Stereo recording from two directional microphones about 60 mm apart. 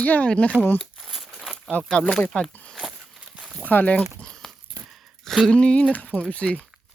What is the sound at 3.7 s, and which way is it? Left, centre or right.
Speech, left.